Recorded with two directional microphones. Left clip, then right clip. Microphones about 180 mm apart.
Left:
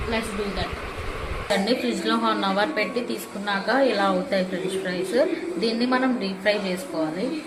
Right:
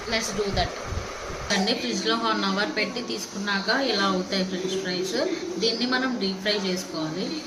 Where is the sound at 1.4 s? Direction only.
15° left (ahead or behind).